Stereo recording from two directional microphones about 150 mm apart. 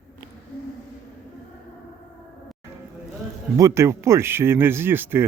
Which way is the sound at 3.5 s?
20° right (ahead or behind).